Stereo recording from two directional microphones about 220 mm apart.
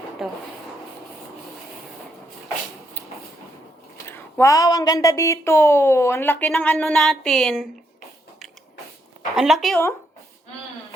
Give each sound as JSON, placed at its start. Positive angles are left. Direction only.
{"t": 0.2, "sound": "speech", "side_deg": 0}
{"t": 3.9, "sound": "speech", "side_deg": 10}
{"t": 9.3, "sound": "speech", "side_deg": 0}